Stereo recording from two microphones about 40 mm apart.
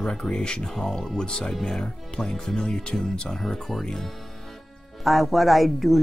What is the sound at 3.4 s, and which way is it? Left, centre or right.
Speech, centre.